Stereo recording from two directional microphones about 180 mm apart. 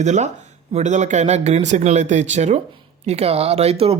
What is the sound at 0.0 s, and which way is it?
Speech, 40° right (ahead or behind).